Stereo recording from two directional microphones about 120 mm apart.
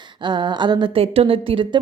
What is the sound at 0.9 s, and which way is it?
Speech, 55° right (ahead or behind).